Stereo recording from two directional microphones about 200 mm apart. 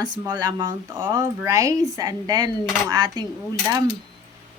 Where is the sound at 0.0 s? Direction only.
20° right (ahead or behind).